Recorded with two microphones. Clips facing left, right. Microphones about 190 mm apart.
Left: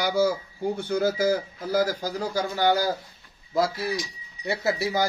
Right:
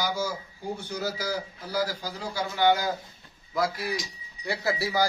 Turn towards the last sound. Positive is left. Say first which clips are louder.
# left 2 dB
turn(degrees=20)  # may be behind; listen again after turning